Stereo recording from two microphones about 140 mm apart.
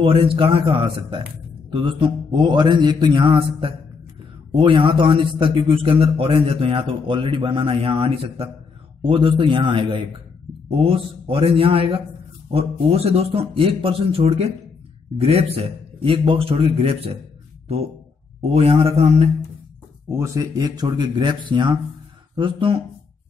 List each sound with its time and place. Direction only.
0.0 s a man's voice: 40° right (ahead or behind)
18.4 s a man's voice: 50° right (ahead or behind)
20.1 s a man's voice: 20° right (ahead or behind); by 22.8 s 35° right (ahead or behind)